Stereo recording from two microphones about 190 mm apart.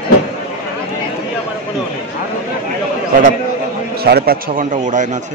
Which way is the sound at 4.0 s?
55° right (ahead or behind).